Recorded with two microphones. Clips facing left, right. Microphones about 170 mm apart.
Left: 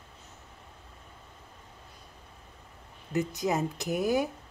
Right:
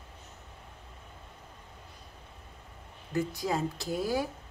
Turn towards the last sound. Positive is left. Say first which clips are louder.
# left 3 dB
turn(degrees=20)  # may be behind; listen again after turning